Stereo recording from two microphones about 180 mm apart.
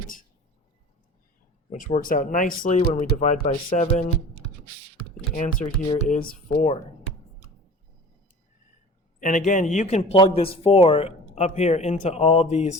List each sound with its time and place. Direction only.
1.7 s speech: 45° left (ahead or behind)
5.3 s speech: 50° left (ahead or behind)
9.2 s speech: 45° left (ahead or behind)